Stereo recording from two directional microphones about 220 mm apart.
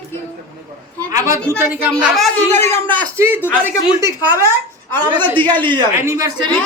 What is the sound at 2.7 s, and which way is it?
Speech, 20° right (ahead or behind).